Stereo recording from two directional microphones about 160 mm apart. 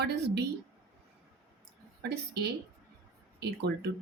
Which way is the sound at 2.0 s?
90° right.